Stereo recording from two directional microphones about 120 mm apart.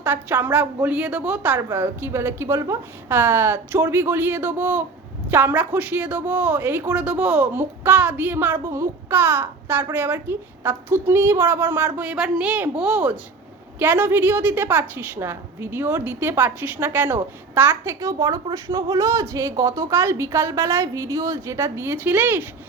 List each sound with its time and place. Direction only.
0.0 s a woman's voice: 15° right (ahead or behind)